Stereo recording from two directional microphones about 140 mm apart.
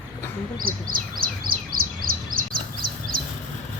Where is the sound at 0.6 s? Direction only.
90° right.